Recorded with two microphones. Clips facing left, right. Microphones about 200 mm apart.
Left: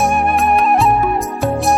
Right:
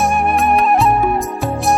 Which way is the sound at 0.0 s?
Centre (ahead or behind).